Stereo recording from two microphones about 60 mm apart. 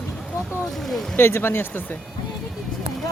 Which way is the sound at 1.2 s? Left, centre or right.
Left.